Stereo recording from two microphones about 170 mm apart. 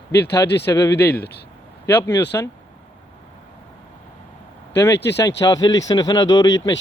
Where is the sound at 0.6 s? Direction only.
20° left (ahead or behind).